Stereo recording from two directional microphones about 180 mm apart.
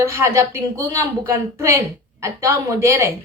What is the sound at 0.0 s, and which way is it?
A woman's voice, 15° right (ahead or behind).